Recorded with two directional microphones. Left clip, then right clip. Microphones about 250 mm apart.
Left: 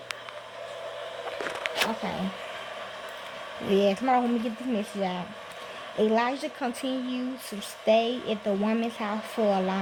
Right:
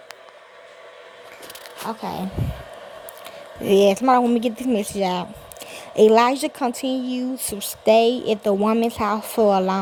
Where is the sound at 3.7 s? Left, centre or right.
Right.